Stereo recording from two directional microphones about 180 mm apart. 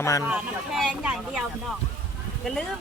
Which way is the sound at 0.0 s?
15° left (ahead or behind).